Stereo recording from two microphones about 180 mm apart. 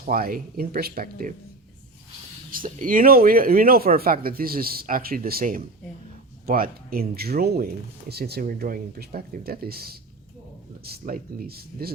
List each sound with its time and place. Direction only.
0.1 s speech: 55° right (ahead or behind)
2.5 s speech: 50° right (ahead or behind)